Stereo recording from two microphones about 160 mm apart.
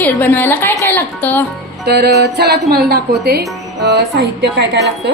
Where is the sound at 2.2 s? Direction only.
90° right.